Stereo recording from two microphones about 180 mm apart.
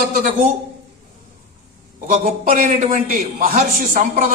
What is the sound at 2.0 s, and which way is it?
A man's voice, 50° right (ahead or behind).